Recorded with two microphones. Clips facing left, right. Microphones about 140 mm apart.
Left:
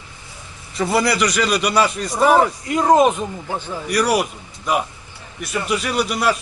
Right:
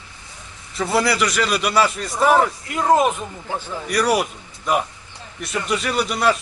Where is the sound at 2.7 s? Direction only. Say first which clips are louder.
Left 2 dB; 15° left (ahead or behind).